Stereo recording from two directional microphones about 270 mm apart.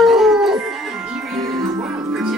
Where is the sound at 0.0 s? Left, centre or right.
Centre.